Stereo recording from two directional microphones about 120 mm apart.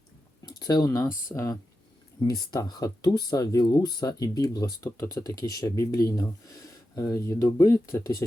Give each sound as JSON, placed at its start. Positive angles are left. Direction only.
{"t": 0.4, "sound": "speech", "side_deg": 35}